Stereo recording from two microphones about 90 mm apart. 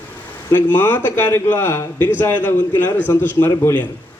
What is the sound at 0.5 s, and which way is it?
Speech, 25° left (ahead or behind).